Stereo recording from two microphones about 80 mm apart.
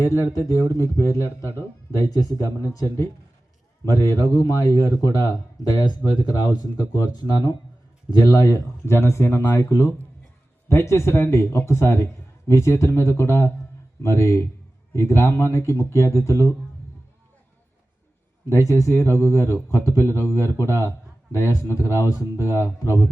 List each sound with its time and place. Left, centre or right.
0.0 s a man's voice: left
2.0 s a man's voice: left
18.4 s a man's voice: left